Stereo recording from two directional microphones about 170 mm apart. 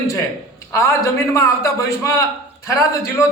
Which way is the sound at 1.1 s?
20° left (ahead or behind).